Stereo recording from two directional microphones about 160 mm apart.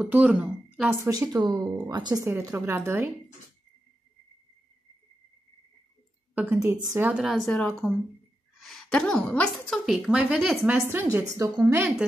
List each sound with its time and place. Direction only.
0.0 s speech: 10° right (ahead or behind)
1.3 s speech: 25° right (ahead or behind)
2.2 s a woman's voice: 15° right (ahead or behind)
6.3 s a woman's voice: 15° right (ahead or behind); by 7.9 s 5° left (ahead or behind)
8.5 s a sound: centre (ahead or behind)
8.9 s a woman's voice: 5° left (ahead or behind)
10.8 s a woman's voice: 15° right (ahead or behind)